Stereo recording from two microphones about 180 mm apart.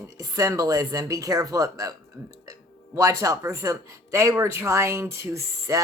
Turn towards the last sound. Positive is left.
turn(degrees=-15)  # may be behind; listen again after turning